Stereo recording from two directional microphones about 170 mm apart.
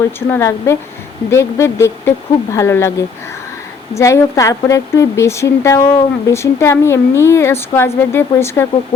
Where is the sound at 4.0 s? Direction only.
15° left (ahead or behind).